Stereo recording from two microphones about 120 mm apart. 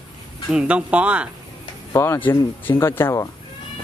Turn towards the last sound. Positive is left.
turn(degrees=20)  # may be behind; listen again after turning